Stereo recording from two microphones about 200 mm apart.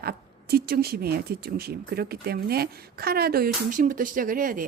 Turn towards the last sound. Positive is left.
turn(degrees=-45)  # may be behind; listen again after turning